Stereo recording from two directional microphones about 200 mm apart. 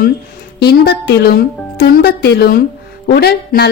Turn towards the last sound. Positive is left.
turn(degrees=50)  # may be behind; listen again after turning